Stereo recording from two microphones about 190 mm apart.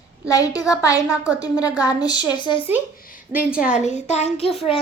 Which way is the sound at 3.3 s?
5° right (ahead or behind).